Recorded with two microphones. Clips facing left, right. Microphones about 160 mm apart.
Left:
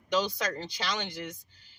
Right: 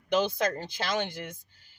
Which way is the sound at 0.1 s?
55° right (ahead or behind).